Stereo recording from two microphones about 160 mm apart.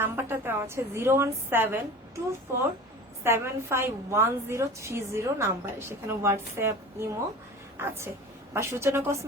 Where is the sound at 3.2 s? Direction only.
15° right (ahead or behind).